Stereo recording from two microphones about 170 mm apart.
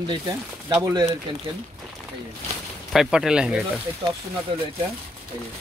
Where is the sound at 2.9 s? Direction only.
5° right (ahead or behind).